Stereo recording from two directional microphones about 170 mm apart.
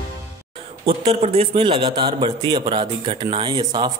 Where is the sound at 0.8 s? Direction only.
35° right (ahead or behind).